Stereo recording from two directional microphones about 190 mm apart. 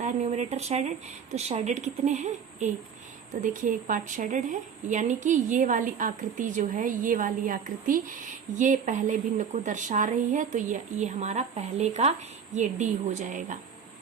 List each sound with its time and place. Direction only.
0.0 s speech: 35° right (ahead or behind)